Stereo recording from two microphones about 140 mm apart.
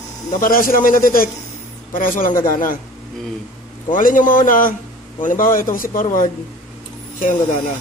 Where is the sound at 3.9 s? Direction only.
75° left (ahead or behind).